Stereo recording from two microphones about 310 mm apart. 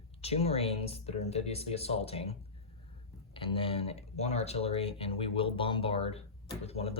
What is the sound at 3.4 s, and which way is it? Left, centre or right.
Speech, centre.